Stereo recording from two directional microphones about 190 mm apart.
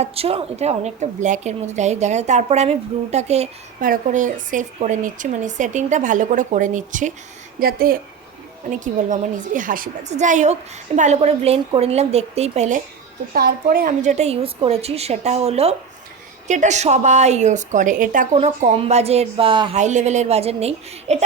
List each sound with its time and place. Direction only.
0.0 s a woman's voice: 30° right (ahead or behind)
13.3 s a woman's voice: 50° right (ahead or behind); by 19.8 s 25° right (ahead or behind)
19.8 s a woman's voice: 40° right (ahead or behind)